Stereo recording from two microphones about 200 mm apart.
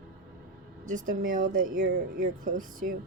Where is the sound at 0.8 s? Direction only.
40° right (ahead or behind).